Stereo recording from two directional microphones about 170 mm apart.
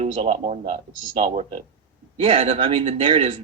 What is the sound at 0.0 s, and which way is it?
A man's voice, 40° right (ahead or behind).